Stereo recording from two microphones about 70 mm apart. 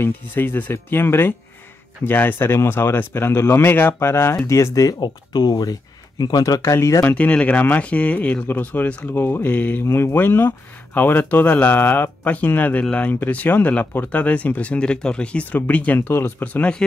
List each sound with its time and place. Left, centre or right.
0.0 s speech: left
4.8 s speech: left
6.6 s speech: left
7.1 s speech: centre